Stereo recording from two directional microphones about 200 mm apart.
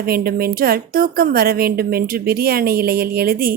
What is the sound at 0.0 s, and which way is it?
A woman's voice, 50° right (ahead or behind).